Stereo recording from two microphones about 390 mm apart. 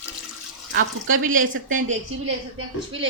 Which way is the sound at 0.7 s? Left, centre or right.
Right.